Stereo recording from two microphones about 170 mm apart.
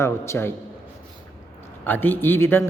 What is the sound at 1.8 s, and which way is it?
Speech, 10° left (ahead or behind).